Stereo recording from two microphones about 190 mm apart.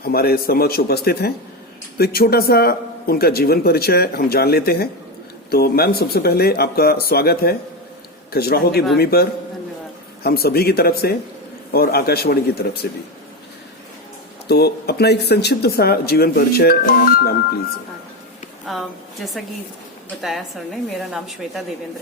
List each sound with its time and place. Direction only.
0.0 s speech: 55° left (ahead or behind)
10.2 s speech: 55° left (ahead or behind)
14.4 s speech: 55° left (ahead or behind)
18.7 s a woman's voice: centre (ahead or behind)